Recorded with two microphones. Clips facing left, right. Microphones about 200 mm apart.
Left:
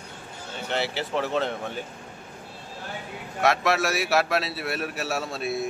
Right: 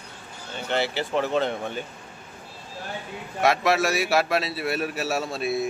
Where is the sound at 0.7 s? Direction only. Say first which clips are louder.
Right 2 dB; centre (ahead or behind).